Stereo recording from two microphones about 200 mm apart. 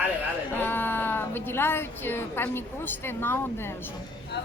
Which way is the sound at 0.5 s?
10° left (ahead or behind).